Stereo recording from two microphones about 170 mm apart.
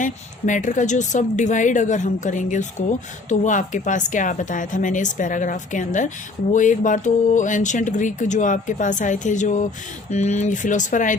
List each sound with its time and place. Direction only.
0.0 s a woman's voice: 50° left (ahead or behind)